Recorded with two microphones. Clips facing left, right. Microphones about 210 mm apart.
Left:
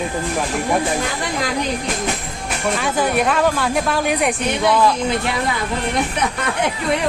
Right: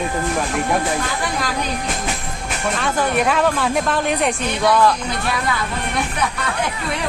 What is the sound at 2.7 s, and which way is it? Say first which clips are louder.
A woman's voice: even; 5° left (ahead or behind).